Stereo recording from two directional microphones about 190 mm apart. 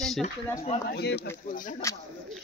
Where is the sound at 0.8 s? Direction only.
60° left (ahead or behind).